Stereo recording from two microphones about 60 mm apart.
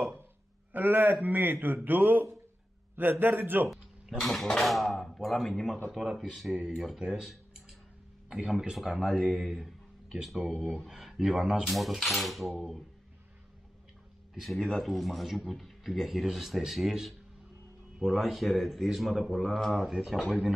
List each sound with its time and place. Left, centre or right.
0.7 s speech: right
4.2 s speech: centre
7.0 s speech: centre
8.3 s speech: centre
8.9 s speech: centre
9.2 s a sound: centre
10.2 s speech: centre
14.3 s speech: centre